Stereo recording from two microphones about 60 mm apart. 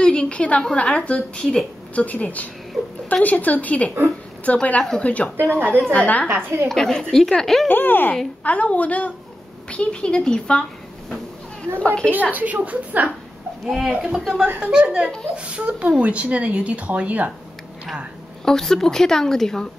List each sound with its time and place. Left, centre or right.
0.0 s a woman's voice: centre
1.4 s a woman's voice: centre
2.0 s a woman's voice: left
5.4 s a woman's voice: right
5.9 s a woman's voice: left
6.7 s a woman's voice: centre
7.6 s a woman's voice: left
12.1 s speech: right
13.7 s speech: centre; by 17.3 s right
18.4 s a woman's voice: centre